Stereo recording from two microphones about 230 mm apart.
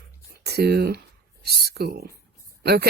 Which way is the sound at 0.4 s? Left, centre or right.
Right.